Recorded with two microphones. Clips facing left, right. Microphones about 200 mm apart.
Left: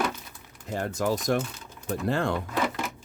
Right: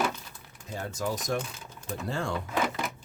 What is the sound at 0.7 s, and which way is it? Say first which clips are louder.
Speech: left 5 dB; 60° left (ahead or behind).